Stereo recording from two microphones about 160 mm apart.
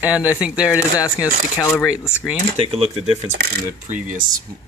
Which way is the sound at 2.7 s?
35° right (ahead or behind).